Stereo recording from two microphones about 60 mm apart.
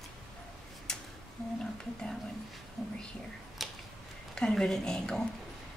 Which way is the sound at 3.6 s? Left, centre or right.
Centre.